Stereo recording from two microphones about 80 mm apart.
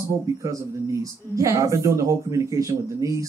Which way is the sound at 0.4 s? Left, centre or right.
Right.